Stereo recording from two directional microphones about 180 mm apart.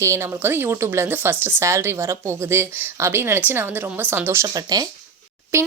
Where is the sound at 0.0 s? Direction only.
15° right (ahead or behind).